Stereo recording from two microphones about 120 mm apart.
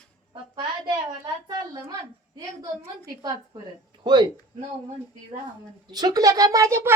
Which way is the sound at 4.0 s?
40° right (ahead or behind).